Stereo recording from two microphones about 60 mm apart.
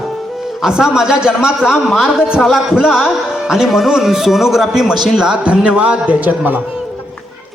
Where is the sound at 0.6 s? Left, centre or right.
Centre.